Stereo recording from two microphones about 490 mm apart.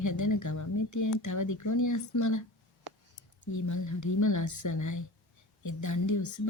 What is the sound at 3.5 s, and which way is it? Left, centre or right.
Speech, left.